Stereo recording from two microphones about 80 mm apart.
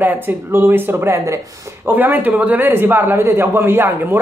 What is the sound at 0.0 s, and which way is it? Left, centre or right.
Speech, right.